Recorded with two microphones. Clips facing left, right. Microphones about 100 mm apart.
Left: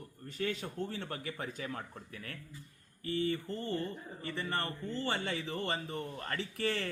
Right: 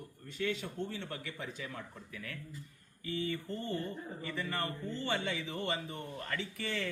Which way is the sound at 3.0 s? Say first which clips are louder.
Left 3 dB; 35° left (ahead or behind).